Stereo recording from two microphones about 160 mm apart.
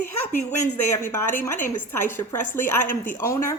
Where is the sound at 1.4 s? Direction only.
50° left (ahead or behind).